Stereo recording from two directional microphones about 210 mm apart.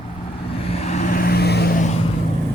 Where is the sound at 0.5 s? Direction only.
30° left (ahead or behind).